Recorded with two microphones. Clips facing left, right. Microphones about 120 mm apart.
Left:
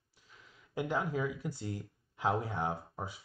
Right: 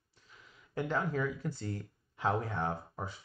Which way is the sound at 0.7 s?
10° left (ahead or behind).